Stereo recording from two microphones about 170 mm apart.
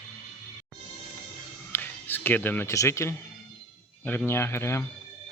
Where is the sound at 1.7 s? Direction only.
10° left (ahead or behind).